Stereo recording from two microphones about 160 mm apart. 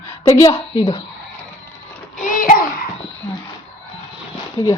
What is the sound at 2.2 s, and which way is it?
Child singing, 60° left (ahead or behind).